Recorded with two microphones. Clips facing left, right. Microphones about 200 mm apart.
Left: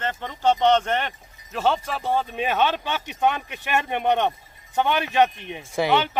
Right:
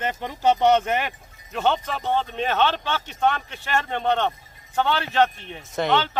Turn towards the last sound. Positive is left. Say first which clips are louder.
# left 1 dB
turn(degrees=10)  # may be behind; listen again after turning